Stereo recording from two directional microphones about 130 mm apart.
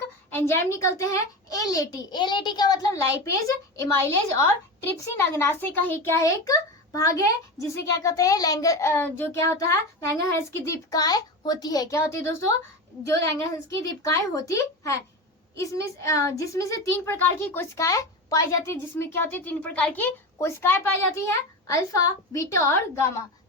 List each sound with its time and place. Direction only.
0.3 s a child's voice: 15° left (ahead or behind)